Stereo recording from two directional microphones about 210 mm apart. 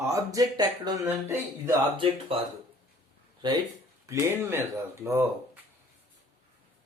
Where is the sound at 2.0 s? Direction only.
25° right (ahead or behind).